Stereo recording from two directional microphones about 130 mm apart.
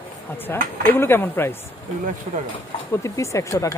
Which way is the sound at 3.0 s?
25° left (ahead or behind).